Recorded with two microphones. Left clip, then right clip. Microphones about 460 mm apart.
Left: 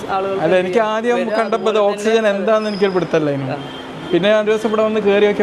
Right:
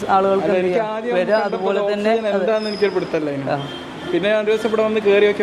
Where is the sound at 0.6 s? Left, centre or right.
Left.